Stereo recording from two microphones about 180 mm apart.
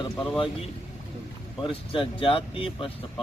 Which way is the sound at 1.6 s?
30° left (ahead or behind).